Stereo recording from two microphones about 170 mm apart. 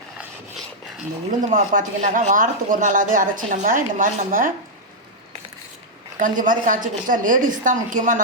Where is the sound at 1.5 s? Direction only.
50° right (ahead or behind).